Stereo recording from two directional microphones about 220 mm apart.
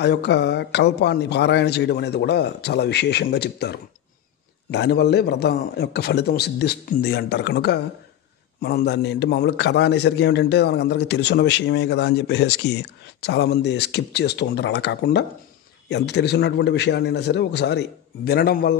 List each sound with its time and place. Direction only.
0.0 s a man's voice: 50° left (ahead or behind)